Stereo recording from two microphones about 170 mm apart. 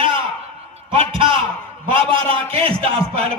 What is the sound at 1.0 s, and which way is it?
A man's voice, 30° right (ahead or behind).